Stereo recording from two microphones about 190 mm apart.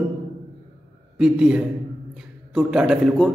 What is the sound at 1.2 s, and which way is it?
Speech, 5° right (ahead or behind).